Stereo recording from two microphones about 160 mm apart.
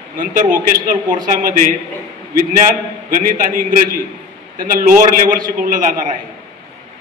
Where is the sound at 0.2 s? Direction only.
60° right (ahead or behind).